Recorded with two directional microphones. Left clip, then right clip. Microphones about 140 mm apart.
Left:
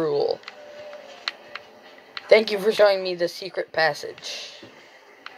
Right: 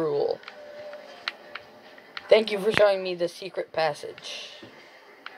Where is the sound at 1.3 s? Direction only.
25° left (ahead or behind).